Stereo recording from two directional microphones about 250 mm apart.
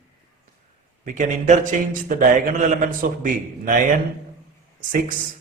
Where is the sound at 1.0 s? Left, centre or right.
Right.